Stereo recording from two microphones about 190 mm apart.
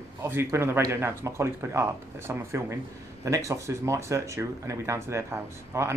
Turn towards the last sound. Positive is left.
turn(degrees=-15)  # may be behind; listen again after turning